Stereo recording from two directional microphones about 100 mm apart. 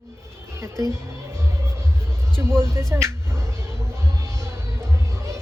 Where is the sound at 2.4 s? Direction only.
25° right (ahead or behind).